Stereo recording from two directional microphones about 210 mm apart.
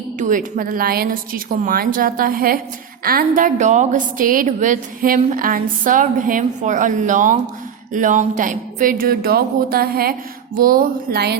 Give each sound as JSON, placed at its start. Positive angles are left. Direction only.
{"t": 0.2, "sound": "a woman's voice", "side_deg": -35}